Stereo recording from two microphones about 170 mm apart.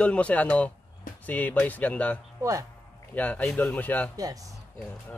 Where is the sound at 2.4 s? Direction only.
20° right (ahead or behind).